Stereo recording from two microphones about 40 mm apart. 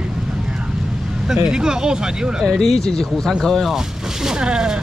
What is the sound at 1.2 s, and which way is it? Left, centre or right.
Speech, centre.